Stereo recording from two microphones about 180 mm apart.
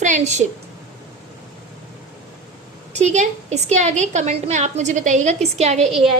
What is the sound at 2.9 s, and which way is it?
A woman's voice, 40° right (ahead or behind).